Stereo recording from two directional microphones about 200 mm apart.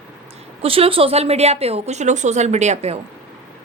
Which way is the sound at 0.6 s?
30° right (ahead or behind).